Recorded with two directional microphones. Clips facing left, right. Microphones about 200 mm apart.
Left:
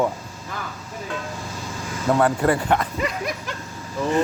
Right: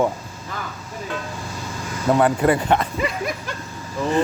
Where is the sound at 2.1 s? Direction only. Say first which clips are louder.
Right 2 dB; 20° right (ahead or behind).